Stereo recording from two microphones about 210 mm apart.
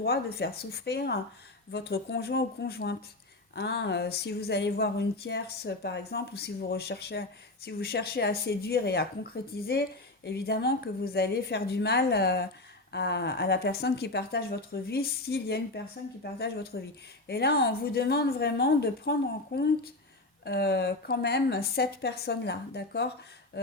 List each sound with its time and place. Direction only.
0.0 s speech: 50° left (ahead or behind)
20.4 s speech: 50° left (ahead or behind)